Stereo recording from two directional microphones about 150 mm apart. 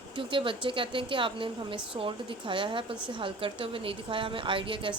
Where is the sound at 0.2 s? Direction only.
35° right (ahead or behind).